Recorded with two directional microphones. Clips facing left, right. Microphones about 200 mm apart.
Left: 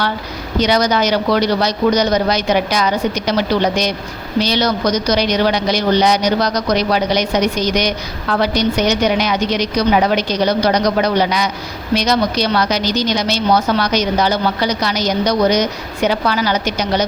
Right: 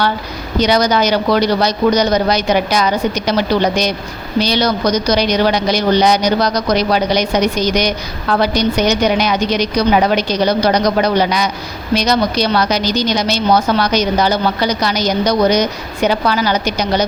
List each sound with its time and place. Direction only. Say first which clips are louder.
0.6 s a woman's voice: right 2 dB; 35° right (ahead or behind)
4.4 s a woman's voice: right 1 dB; 35° right (ahead or behind)